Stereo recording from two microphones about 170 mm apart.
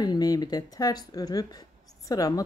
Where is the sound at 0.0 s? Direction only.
25° left (ahead or behind).